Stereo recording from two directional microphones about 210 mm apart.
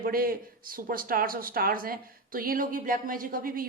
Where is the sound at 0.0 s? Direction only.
45° right (ahead or behind).